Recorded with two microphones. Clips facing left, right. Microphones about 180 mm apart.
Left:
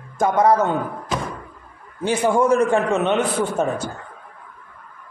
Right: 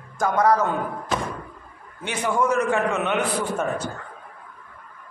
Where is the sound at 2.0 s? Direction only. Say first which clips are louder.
Left 6 dB; 30° left (ahead or behind).